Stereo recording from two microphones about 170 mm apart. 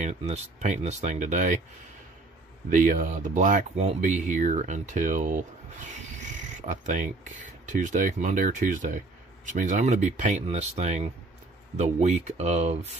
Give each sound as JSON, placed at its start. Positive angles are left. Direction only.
{"t": 0.0, "sound": "speech", "side_deg": -40}
{"t": 2.7, "sound": "speech", "side_deg": -50}